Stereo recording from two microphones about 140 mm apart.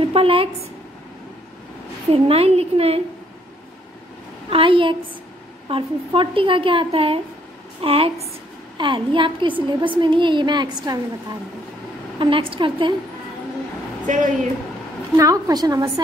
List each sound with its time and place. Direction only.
0.0 s a woman's voice: 40° right (ahead or behind)
2.0 s a woman's voice: 45° right (ahead or behind)
4.5 s a woman's voice: 40° right (ahead or behind)
14.0 s speech: 65° right (ahead or behind)
15.1 s a woman's voice: 25° right (ahead or behind)